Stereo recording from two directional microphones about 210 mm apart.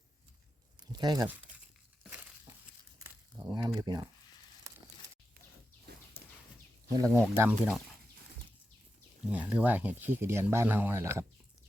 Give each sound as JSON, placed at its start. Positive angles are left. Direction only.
{"t": 0.8, "sound": "speech", "side_deg": -20}
{"t": 3.0, "sound": "crumpling", "side_deg": -15}
{"t": 3.8, "sound": "speech", "side_deg": -20}
{"t": 6.9, "sound": "speech", "side_deg": -15}
{"t": 9.3, "sound": "speech", "side_deg": -5}